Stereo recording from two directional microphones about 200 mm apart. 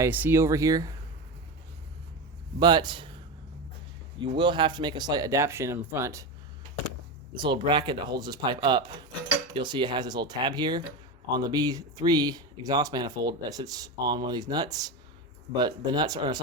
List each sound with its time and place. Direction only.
0.0 s speech: 10° right (ahead or behind)
2.6 s speech: 20° right (ahead or behind)
4.2 s speech: 25° right (ahead or behind)
7.3 s speech: 25° right (ahead or behind)